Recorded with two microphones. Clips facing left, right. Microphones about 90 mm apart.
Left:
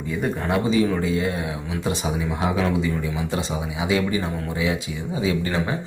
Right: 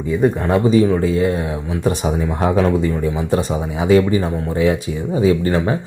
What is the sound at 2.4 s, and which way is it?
Speech, 45° right (ahead or behind).